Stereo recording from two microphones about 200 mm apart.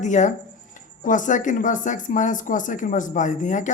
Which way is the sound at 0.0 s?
35° left (ahead or behind).